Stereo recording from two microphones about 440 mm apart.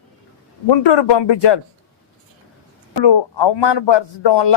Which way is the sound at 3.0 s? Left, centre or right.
Left.